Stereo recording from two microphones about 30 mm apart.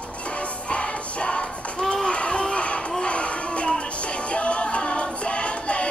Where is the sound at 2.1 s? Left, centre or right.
Left.